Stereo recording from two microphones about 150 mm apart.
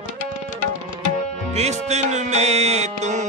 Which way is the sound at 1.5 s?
45° right (ahead or behind).